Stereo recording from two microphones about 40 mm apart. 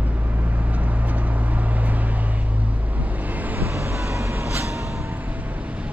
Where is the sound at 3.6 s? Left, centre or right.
Right.